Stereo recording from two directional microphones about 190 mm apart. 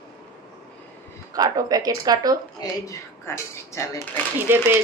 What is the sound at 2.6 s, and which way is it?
Speech, 15° left (ahead or behind).